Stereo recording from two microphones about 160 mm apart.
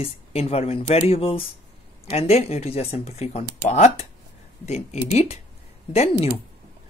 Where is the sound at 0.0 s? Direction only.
40° left (ahead or behind).